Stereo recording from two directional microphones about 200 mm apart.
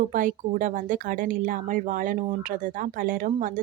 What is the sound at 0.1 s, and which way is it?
Speech, 40° right (ahead or behind).